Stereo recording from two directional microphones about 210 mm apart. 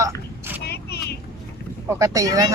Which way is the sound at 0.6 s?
50° left (ahead or behind).